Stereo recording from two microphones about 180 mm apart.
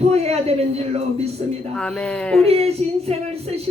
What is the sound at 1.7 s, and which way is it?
Speech, 5° left (ahead or behind).